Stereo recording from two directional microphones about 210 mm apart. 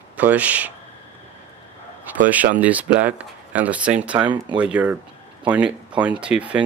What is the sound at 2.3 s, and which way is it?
Speech, 5° right (ahead or behind).